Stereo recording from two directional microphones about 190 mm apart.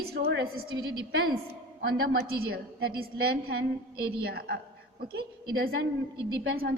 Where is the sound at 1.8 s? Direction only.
55° right (ahead or behind).